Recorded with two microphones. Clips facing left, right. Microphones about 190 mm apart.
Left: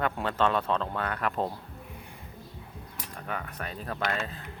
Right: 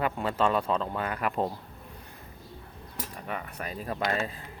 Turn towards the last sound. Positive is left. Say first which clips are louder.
# right 2 dB
turn(degrees=-5)  # may be behind; listen again after turning